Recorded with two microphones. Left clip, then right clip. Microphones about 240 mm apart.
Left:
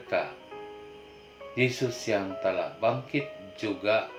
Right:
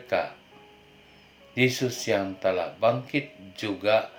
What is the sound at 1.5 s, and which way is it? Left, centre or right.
Speech, right.